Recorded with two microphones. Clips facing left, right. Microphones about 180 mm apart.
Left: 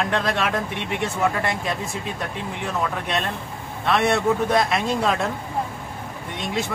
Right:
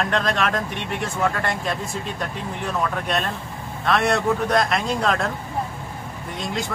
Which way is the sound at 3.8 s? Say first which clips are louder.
Even; 5° left (ahead or behind).